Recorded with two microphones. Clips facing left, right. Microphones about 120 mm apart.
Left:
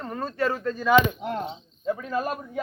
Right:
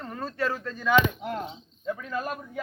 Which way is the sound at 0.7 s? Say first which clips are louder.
Left 3 dB; 10° left (ahead or behind).